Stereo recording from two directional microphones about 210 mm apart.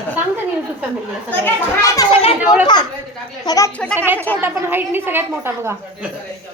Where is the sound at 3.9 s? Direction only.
10° right (ahead or behind).